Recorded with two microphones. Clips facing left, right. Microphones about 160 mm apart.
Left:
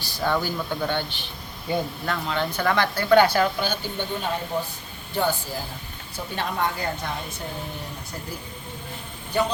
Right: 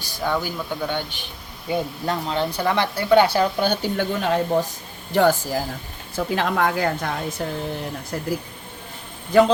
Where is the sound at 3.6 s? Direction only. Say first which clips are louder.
Right 6 dB; 75° right (ahead or behind).